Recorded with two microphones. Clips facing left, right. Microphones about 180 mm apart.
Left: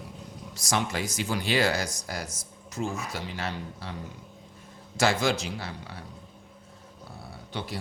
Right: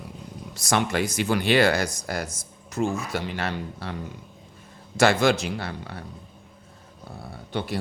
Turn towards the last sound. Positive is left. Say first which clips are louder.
# right 6 dB
turn(degrees=-55)  # may be behind; listen again after turning